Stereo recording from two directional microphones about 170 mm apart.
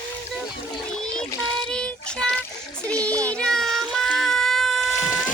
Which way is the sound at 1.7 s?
5° left (ahead or behind).